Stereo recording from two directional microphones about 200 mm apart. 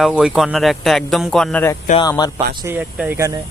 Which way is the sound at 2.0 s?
20° left (ahead or behind).